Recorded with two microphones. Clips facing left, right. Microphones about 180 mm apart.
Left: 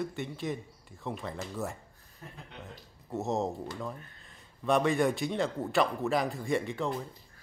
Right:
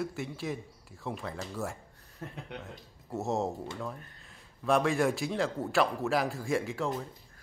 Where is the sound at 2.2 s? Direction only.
75° right (ahead or behind).